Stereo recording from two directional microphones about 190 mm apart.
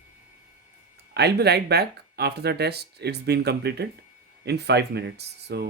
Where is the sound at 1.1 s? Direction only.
60° right (ahead or behind).